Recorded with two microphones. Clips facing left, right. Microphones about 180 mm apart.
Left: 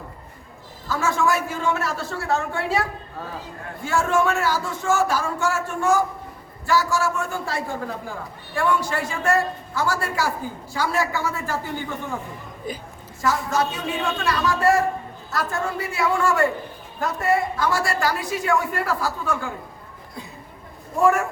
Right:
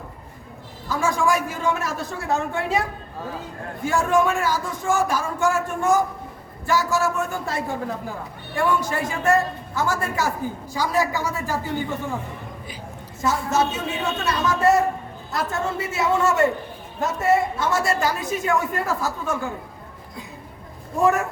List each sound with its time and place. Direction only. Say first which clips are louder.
0.9 s speech: right 1 dB; 15° right (ahead or behind)
3.8 s a woman's voice: right 1 dB; 15° right (ahead or behind)
13.2 s a woman's voice: right 1 dB; 25° right (ahead or behind)
21.0 s a woman's voice: left 1 dB; 20° right (ahead or behind)